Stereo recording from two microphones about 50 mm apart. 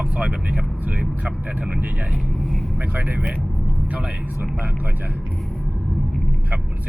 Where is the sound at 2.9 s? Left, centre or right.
Right.